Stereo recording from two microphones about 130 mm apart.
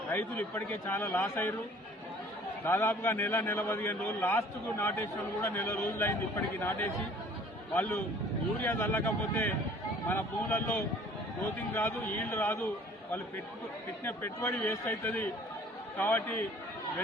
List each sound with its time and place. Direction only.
0.1 s a man's voice: 15° left (ahead or behind)
2.6 s a man's voice: 15° left (ahead or behind)
11.7 s a man's voice: 15° left (ahead or behind)
14.0 s a man's voice: 15° left (ahead or behind)